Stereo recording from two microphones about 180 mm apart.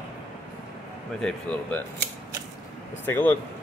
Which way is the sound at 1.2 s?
5° left (ahead or behind).